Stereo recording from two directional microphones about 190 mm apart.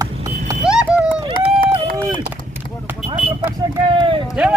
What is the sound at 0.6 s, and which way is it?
Clip-clop, 5° right (ahead or behind).